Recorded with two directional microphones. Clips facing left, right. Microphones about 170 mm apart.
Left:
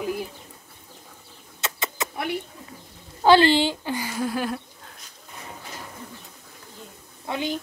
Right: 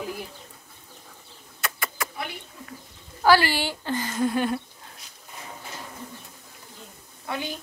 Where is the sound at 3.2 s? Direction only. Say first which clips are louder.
Left 4 dB; 20° left (ahead or behind); by 4.6 s centre (ahead or behind).